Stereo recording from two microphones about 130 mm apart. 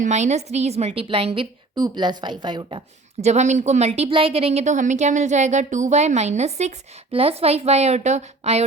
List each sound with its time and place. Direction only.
0.0 s speech: 65° right (ahead or behind); by 1.5 s 45° right (ahead or behind)
1.7 s a woman's voice: 35° right (ahead or behind)
3.2 s speech: 60° right (ahead or behind)